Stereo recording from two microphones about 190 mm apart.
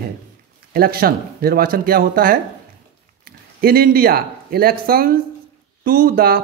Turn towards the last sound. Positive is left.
turn(degrees=-50)  # may be behind; listen again after turning